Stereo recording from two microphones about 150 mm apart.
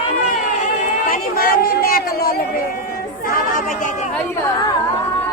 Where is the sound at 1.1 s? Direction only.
75° left (ahead or behind).